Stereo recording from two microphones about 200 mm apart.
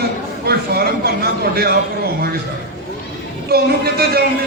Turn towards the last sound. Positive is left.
turn(degrees=-50)  # may be behind; listen again after turning